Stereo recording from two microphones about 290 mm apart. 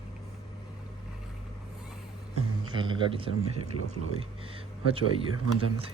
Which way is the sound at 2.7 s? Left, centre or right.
Centre.